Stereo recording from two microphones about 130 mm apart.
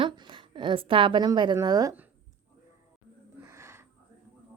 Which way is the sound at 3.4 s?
20° right (ahead or behind).